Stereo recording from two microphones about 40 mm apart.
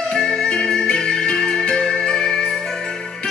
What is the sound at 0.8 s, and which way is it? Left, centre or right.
Music, centre.